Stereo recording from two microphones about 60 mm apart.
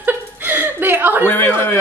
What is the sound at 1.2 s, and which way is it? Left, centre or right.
Speech, left.